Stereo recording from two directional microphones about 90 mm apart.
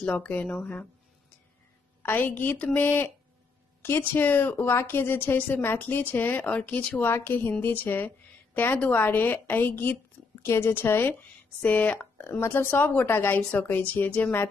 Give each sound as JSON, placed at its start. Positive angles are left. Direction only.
{"t": 0.0, "sound": "speech", "side_deg": 15}
{"t": 2.0, "sound": "speech", "side_deg": 20}